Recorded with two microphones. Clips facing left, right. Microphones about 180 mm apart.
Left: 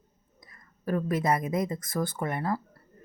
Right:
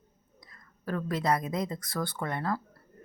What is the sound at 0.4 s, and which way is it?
Speech, 15° left (ahead or behind).